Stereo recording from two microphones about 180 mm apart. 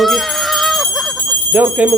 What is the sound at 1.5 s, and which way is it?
Speech, 10° right (ahead or behind).